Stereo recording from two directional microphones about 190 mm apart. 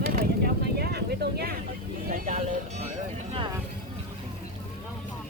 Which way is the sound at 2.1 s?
45° right (ahead or behind).